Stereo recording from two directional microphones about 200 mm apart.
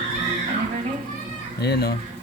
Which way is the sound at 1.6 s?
55° left (ahead or behind).